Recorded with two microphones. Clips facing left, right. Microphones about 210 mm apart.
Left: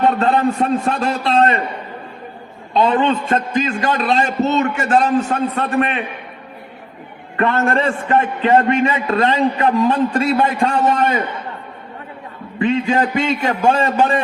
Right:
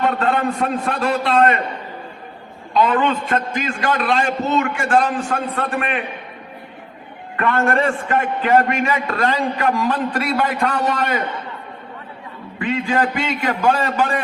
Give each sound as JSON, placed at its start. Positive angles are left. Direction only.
{"t": 0.2, "sound": "a man's voice", "side_deg": 25}
{"t": 2.7, "sound": "a man's voice", "side_deg": 25}
{"t": 7.3, "sound": "a man's voice", "side_deg": 25}
{"t": 12.5, "sound": "a man's voice", "side_deg": 25}